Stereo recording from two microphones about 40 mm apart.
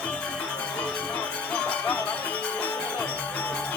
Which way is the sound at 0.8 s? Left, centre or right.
Left.